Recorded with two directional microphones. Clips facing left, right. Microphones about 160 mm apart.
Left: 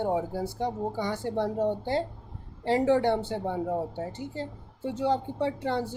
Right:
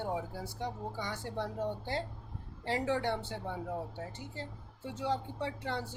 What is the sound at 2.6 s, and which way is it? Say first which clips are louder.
Speech: left 9 dB; 30° left (ahead or behind).